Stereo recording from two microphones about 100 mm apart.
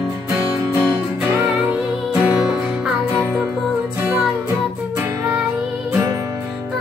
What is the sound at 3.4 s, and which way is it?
Music, 20° right (ahead or behind).